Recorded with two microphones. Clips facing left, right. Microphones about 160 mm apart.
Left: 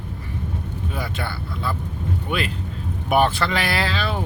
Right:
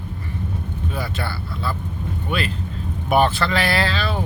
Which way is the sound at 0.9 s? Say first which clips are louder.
Right 1 dB; 15° left (ahead or behind).